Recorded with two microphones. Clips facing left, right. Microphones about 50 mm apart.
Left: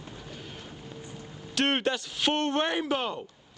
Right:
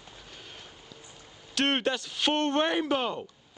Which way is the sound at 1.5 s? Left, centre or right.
Centre.